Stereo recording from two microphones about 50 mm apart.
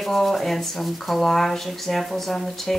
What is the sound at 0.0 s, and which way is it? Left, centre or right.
Speech, centre.